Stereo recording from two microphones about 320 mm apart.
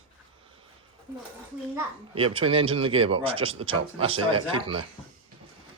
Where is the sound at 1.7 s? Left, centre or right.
Centre.